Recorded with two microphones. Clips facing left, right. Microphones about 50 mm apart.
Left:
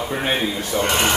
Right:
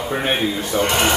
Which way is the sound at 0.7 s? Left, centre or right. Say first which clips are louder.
Right 1 dB; right.